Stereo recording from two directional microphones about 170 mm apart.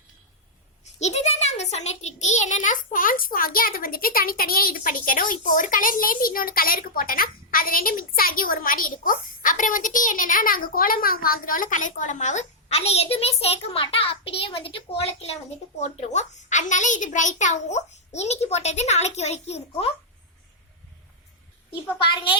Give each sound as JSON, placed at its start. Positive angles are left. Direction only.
{"t": 0.9, "sound": "a child's voice", "side_deg": 40}
{"t": 22.1, "sound": "a child's voice", "side_deg": 30}